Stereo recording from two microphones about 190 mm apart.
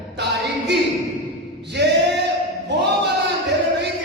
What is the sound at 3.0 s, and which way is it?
Music, 65° right (ahead or behind).